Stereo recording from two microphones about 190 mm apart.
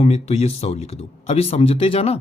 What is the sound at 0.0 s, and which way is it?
A woman's voice, 35° left (ahead or behind).